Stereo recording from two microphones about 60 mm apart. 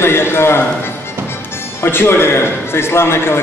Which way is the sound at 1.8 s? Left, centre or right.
Left.